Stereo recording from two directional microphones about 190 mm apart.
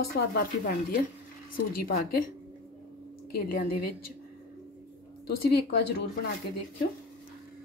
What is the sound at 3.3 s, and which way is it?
Speech, 50° left (ahead or behind).